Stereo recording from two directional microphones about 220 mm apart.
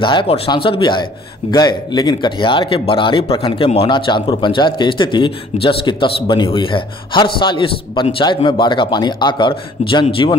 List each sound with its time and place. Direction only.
0.0 s speech: 20° left (ahead or behind)